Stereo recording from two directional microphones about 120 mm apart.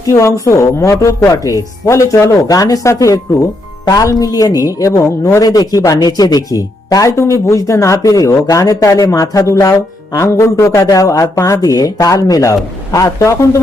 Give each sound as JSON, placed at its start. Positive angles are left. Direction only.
{"t": 0.0, "sound": "a man's voice", "side_deg": 25}